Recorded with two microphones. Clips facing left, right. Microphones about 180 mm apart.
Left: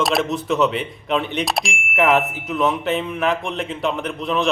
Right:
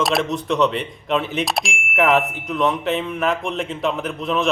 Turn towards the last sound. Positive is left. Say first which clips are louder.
# even
turn(degrees=0)  # may be behind; listen again after turning